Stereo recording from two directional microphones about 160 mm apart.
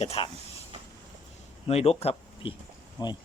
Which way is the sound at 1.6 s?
40° left (ahead or behind).